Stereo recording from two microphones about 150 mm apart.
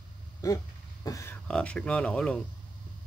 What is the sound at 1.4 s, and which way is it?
Speech, 5° left (ahead or behind).